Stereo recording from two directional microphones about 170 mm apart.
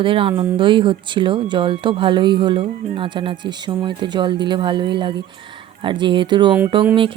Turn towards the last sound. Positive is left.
turn(degrees=-30)  # may be behind; listen again after turning